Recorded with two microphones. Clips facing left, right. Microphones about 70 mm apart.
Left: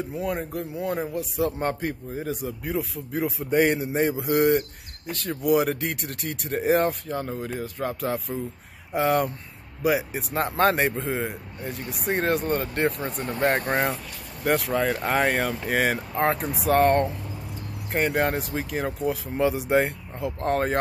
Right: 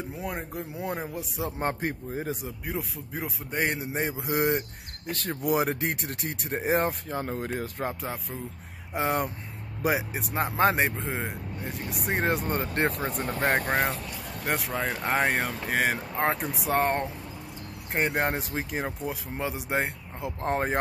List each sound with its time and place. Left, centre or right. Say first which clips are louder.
0.2 s speech: left 6 dB; centre
1.8 s speech: left 1 dB; right
2.4 s speech: left 5 dB; centre
4.3 s speech: left 5 dB; centre
5.4 s speech: left 4 dB; right
7.2 s speech: left 1 dB; right
8.9 s speech: left 5 dB; centre
13.5 s speech: left 1 dB; centre